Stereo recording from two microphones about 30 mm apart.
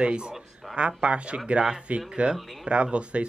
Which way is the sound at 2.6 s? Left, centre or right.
Right.